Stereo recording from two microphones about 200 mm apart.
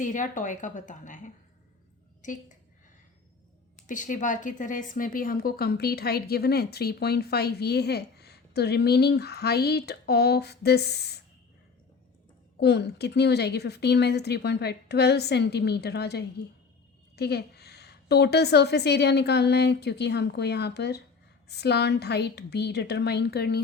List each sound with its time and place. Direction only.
0.0 s a woman's voice: 40° left (ahead or behind)
3.8 s speech: 40° left (ahead or behind)
12.5 s a woman's voice: 55° left (ahead or behind)